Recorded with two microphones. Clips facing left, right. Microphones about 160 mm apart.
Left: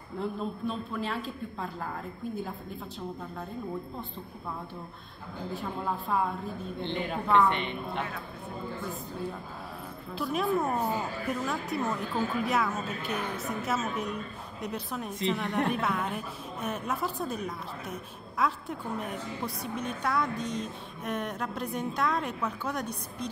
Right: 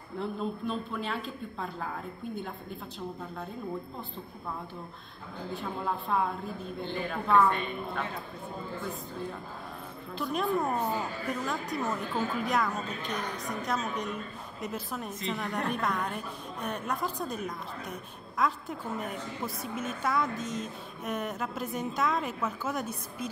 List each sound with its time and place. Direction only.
0.2 s a woman's voice: centre (ahead or behind)
5.5 s a woman's voice: centre (ahead or behind)
7.4 s a woman's voice: 25° left (ahead or behind)
10.1 s a woman's voice: centre (ahead or behind)